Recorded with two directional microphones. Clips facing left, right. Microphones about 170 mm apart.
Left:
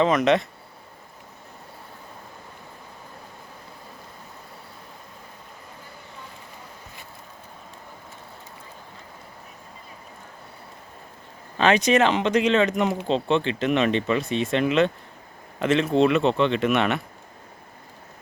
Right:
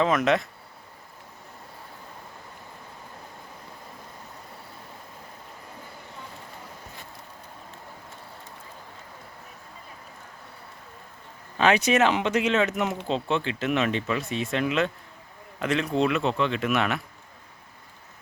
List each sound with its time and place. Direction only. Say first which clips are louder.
0.0 s speech: left 3 dB; centre (ahead or behind)
11.5 s speech: left 2 dB; 10° right (ahead or behind)